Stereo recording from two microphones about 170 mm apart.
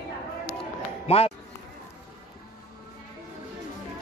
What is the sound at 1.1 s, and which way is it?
Speech, 35° left (ahead or behind).